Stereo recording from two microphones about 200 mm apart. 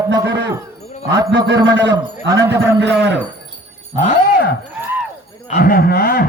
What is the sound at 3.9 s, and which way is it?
Speech, 35° left (ahead or behind).